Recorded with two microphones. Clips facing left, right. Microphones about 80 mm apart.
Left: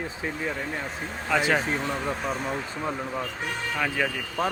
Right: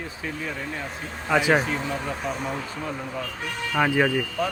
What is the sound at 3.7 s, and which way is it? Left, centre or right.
Speech, right.